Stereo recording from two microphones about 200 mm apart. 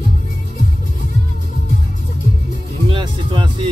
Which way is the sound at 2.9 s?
25° right (ahead or behind).